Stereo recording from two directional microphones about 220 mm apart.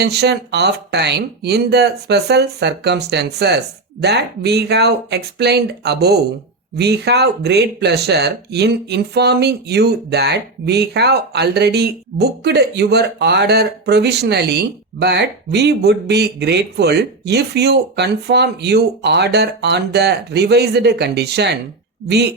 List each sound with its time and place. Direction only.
0.0 s speech: 50° right (ahead or behind)